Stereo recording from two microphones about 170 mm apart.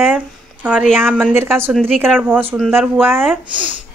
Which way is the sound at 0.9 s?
10° right (ahead or behind).